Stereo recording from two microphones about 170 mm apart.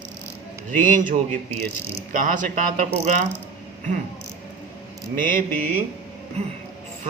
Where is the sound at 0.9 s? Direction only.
50° right (ahead or behind).